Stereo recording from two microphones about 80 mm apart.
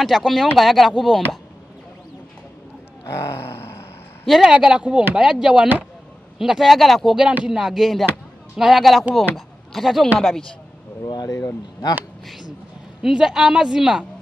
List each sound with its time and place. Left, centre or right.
0.0 s speech: centre
3.1 s a sound: left
4.3 s a woman's voice: centre
7.2 s a woman's voice: centre
11.2 s speech: left
13.0 s a woman's voice: centre